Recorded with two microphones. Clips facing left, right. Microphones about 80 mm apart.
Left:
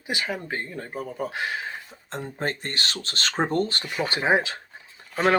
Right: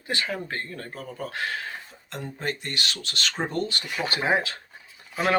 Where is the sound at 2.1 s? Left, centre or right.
Left.